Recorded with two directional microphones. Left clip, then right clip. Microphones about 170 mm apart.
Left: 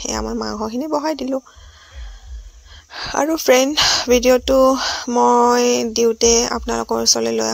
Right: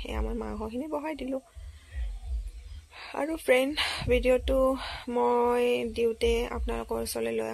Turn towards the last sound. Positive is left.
turn(degrees=40)  # may be behind; listen again after turning